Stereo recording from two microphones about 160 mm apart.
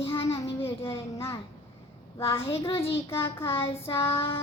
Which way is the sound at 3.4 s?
35° left (ahead or behind).